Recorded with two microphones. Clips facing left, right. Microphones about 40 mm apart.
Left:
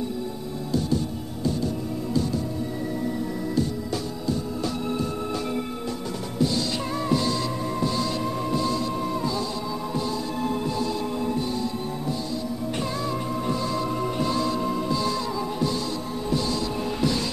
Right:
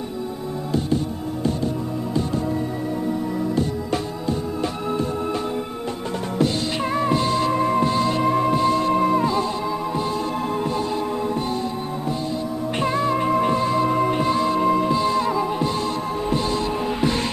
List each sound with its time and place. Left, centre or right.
0.7 s music: right
3.5 s music: right
6.3 s music: right
6.9 s music: right
12.8 s music: right
14.6 s music: right